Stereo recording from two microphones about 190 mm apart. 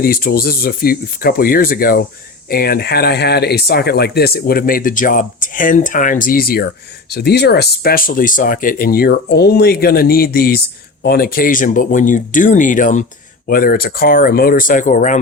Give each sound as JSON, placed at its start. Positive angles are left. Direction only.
{"t": 0.0, "sound": "speech", "side_deg": 50}